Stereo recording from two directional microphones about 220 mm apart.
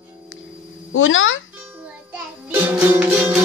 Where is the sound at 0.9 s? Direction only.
60° left (ahead or behind).